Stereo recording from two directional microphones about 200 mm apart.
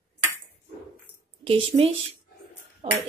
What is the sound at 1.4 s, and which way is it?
Speech, 25° right (ahead or behind).